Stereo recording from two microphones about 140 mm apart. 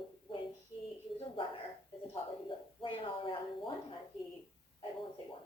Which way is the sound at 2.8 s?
40° left (ahead or behind).